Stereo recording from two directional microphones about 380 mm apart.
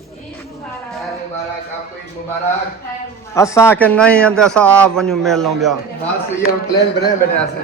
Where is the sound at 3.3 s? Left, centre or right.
Centre.